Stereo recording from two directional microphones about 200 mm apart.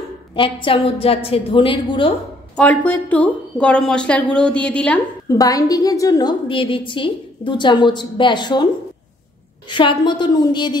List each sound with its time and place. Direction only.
0.4 s a woman's voice: 25° left (ahead or behind)
2.5 s speech: 5° left (ahead or behind)
5.3 s a woman's voice: 15° left (ahead or behind)
9.7 s a woman's voice: 25° left (ahead or behind)